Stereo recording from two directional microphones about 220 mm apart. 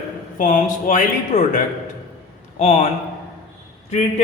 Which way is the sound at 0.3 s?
35° left (ahead or behind).